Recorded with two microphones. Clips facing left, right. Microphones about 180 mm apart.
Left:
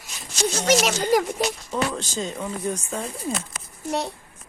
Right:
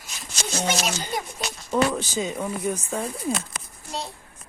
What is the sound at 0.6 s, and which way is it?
Speech, 75° left (ahead or behind).